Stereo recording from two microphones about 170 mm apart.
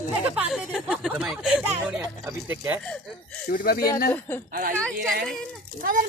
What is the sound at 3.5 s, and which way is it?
Speech, 60° left (ahead or behind).